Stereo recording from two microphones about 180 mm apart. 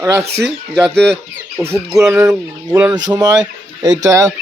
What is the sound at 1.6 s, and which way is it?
Speech, 15° right (ahead or behind).